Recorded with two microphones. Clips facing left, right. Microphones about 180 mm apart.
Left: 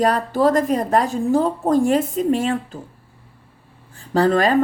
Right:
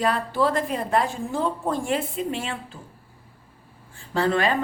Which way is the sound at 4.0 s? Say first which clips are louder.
Left 6 dB; 40° left (ahead or behind).